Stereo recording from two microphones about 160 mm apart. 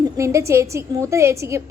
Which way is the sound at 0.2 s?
20° right (ahead or behind).